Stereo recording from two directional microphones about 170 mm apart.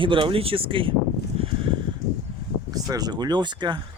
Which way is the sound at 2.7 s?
20° right (ahead or behind).